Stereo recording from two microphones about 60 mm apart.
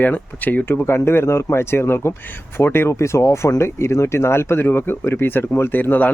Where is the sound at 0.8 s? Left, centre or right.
Left.